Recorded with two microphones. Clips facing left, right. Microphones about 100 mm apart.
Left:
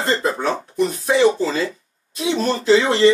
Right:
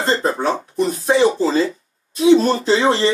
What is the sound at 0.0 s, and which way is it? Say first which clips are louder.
Speech: right 2 dB; 30° right (ahead or behind).